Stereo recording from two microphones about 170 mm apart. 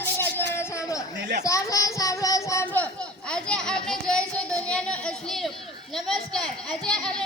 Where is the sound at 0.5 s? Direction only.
15° left (ahead or behind).